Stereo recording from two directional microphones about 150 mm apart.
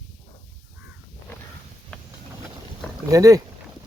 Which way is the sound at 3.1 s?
20° right (ahead or behind).